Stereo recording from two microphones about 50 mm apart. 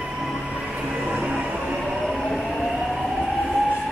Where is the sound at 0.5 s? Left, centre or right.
Right.